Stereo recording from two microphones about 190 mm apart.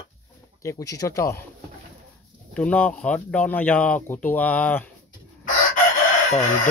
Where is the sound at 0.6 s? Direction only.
15° left (ahead or behind).